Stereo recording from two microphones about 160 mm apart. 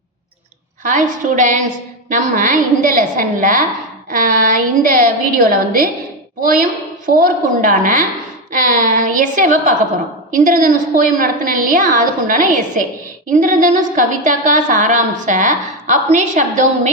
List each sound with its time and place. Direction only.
0.9 s a woman's voice: 55° right (ahead or behind)